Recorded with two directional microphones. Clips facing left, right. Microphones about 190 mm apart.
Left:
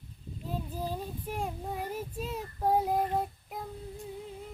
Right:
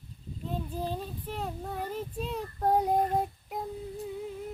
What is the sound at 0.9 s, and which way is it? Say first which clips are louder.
Child singing: right 1 dB; 10° left (ahead or behind).